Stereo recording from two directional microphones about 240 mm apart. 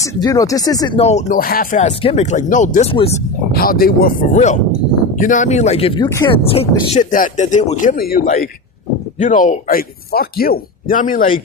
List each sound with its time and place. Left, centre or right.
0.0 s speech: centre
3.5 s speech: left